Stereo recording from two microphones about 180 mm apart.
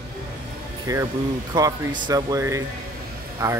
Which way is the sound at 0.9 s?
20° right (ahead or behind).